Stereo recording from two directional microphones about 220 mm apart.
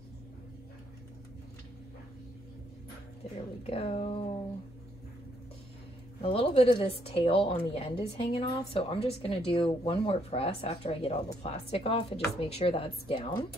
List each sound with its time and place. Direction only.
3.6 s a woman's voice: 25° left (ahead or behind)
6.2 s a woman's voice: 25° left (ahead or behind)